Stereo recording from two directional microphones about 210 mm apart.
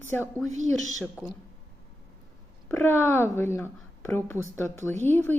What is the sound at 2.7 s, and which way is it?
A woman's voice, 10° left (ahead or behind).